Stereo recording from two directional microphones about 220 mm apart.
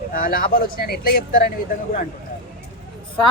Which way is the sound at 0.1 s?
40° left (ahead or behind).